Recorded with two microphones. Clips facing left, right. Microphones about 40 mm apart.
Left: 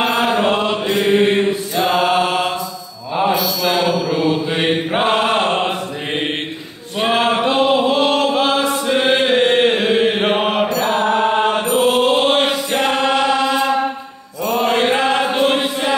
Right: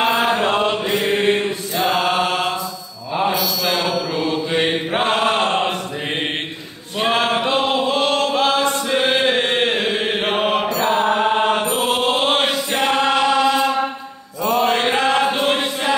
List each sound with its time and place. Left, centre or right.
0.0 s chant: centre
3.2 s mantra: centre
7.0 s chant: centre
10.8 s mantra: centre